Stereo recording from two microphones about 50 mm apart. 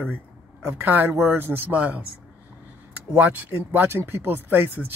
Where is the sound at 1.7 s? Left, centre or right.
Right.